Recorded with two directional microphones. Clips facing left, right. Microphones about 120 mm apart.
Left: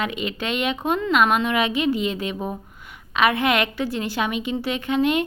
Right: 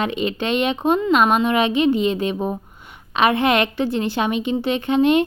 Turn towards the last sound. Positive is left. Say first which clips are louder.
# right 5 dB
turn(degrees=-25)  # may be behind; listen again after turning